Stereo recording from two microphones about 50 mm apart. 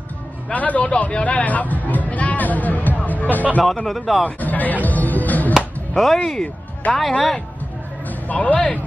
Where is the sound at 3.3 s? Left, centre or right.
Left.